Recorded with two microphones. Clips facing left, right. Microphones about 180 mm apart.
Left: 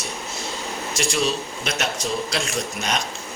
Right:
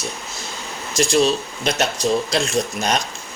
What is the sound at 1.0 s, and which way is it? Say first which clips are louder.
Speech: right 7 dB; 35° right (ahead or behind).